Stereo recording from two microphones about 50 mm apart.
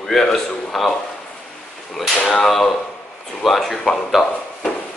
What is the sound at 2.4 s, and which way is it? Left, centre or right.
Speech, centre.